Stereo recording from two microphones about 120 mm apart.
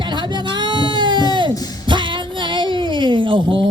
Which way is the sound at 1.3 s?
40° right (ahead or behind).